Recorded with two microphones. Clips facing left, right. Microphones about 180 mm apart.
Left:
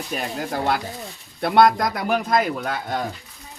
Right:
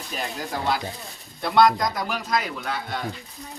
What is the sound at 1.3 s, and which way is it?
Speech, 55° left (ahead or behind).